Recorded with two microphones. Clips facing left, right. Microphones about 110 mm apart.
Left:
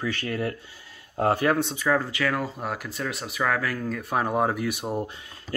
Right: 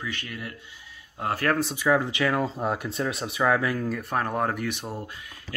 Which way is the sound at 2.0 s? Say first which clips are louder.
Right 2 dB; 20° right (ahead or behind).